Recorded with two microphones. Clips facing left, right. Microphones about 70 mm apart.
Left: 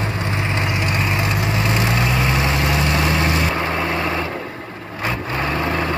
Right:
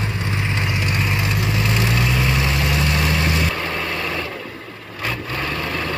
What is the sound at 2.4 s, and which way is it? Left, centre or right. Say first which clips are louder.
Vehicle: left 2 dB; left.